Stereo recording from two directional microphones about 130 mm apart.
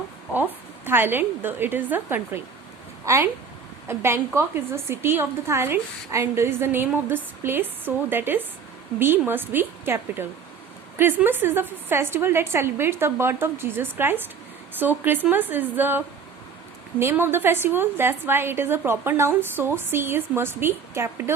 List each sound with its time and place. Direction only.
0.3 s a woman's voice: 15° right (ahead or behind)